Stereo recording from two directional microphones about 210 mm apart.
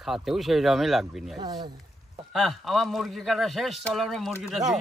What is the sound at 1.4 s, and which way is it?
Speech, 20° right (ahead or behind).